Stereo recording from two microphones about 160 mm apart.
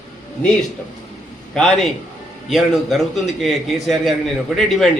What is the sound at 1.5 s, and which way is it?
A man's voice, 5° left (ahead or behind).